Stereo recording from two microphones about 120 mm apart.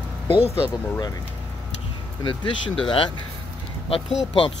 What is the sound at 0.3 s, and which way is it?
Speech, 55° left (ahead or behind).